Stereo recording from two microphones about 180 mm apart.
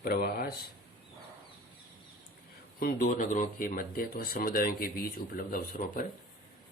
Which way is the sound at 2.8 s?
55° left (ahead or behind).